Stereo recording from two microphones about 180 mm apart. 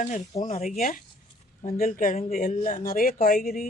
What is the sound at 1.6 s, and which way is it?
Speech, 55° left (ahead or behind).